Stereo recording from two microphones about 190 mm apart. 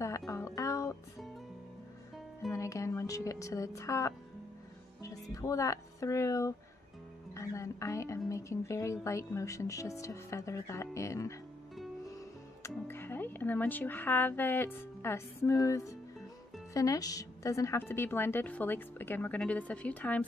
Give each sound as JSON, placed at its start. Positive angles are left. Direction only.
{"t": 0.3, "sound": "music", "side_deg": 15}
{"t": 2.5, "sound": "music", "side_deg": 15}
{"t": 5.0, "sound": "speech", "side_deg": 15}
{"t": 7.3, "sound": "music", "side_deg": 15}
{"t": 8.3, "sound": "a woman's voice", "side_deg": 15}
{"t": 12.6, "sound": "a woman's voice", "side_deg": 10}